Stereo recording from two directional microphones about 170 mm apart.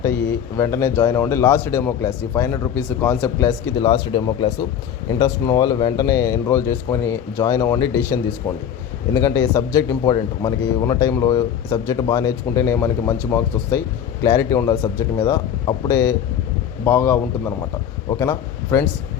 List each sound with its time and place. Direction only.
0.0 s speech: 20° left (ahead or behind)